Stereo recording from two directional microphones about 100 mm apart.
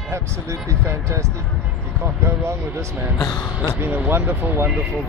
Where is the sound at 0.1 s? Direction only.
30° right (ahead or behind).